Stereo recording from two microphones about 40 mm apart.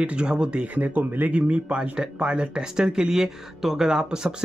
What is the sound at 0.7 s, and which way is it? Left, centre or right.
Speech, right.